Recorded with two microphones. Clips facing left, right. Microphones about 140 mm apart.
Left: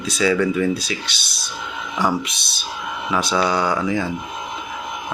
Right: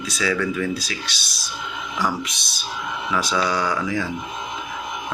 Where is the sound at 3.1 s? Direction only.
25° left (ahead or behind).